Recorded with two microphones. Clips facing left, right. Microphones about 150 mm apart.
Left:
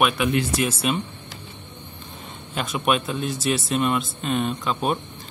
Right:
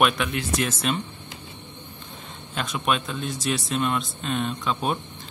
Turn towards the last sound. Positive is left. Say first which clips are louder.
# left 2 dB
turn(degrees=5)  # may be behind; listen again after turning